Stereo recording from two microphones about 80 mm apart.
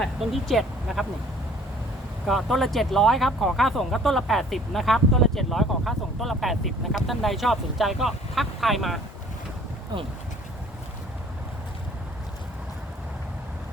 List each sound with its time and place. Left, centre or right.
0.2 s speech: centre
2.2 s speech: centre
9.9 s speech: right